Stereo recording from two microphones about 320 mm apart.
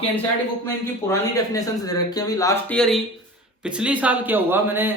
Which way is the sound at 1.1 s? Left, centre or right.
Centre.